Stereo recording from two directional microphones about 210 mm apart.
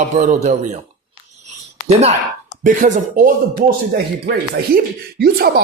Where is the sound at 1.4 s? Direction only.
30° right (ahead or behind).